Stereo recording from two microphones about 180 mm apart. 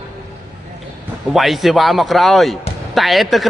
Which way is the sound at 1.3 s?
Centre (ahead or behind).